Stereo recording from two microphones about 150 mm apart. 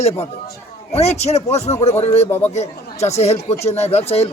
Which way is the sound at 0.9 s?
45° left (ahead or behind).